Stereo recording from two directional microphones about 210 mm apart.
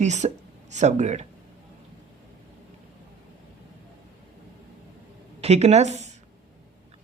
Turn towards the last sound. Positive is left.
turn(degrees=-30)  # may be behind; listen again after turning